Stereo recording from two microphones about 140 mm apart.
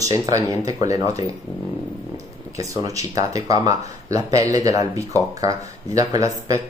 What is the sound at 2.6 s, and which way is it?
Speech, 25° right (ahead or behind).